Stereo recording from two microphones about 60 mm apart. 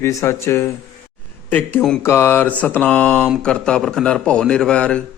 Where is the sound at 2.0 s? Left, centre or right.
Left.